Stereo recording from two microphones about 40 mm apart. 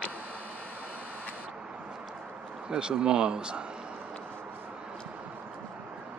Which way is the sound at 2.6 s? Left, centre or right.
Right.